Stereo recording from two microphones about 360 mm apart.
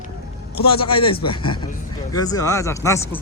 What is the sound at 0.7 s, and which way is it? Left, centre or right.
Speech, centre.